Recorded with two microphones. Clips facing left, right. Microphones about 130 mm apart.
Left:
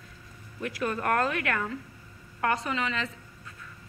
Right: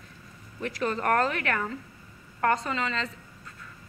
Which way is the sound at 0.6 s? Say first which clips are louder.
Right 2 dB; 10° left (ahead or behind).